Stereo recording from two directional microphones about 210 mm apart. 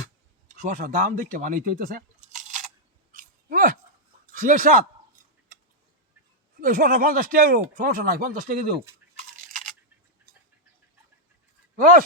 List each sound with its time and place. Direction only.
0.6 s speech: 35° right (ahead or behind)
3.2 s a sound: 40° right (ahead or behind)
6.6 s speech: 40° right (ahead or behind)
11.8 s speech: 40° right (ahead or behind)